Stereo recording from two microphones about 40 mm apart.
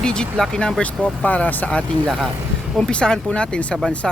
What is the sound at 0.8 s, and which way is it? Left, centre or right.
Speech, left.